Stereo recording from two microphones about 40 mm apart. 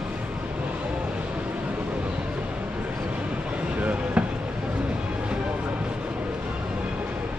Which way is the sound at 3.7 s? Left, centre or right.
Right.